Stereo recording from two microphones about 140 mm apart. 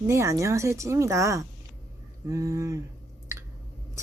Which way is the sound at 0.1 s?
20° right (ahead or behind).